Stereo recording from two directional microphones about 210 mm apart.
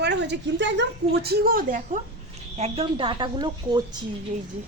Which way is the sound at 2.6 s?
30° right (ahead or behind).